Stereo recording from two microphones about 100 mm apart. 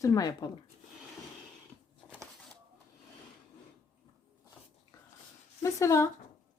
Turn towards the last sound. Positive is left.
turn(degrees=30)  # may be behind; listen again after turning